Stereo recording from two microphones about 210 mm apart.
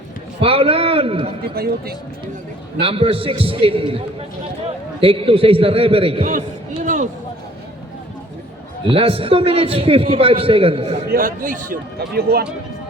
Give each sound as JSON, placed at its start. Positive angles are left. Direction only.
{"t": 0.4, "sound": "a sound", "side_deg": -25}
{"t": 1.5, "sound": "speech", "side_deg": -45}
{"t": 2.8, "sound": "a man's voice", "side_deg": -25}
{"t": 8.9, "sound": "a man's voice", "side_deg": -25}
{"t": 11.1, "sound": "a man's voice", "side_deg": -40}